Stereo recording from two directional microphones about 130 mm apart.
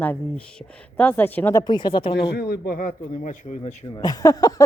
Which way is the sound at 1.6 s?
35° left (ahead or behind).